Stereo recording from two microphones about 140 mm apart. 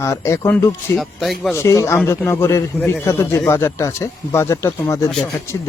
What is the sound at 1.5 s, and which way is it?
Speech, 20° left (ahead or behind).